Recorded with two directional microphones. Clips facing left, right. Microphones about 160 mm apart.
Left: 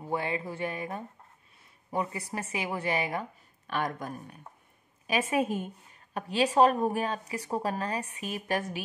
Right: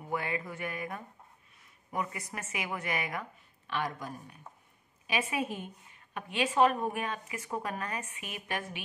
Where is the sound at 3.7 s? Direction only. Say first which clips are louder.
Left 3 dB; 50° left (ahead or behind).